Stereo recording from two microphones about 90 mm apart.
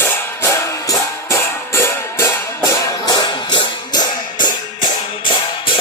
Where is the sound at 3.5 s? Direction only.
55° left (ahead or behind).